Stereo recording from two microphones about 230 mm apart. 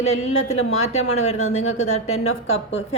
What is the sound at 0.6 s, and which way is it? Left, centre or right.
A woman's voice, left.